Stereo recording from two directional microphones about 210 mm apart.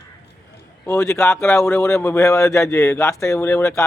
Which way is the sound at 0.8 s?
15° left (ahead or behind).